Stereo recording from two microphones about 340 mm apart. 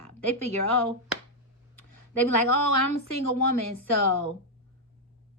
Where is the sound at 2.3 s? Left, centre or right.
Left.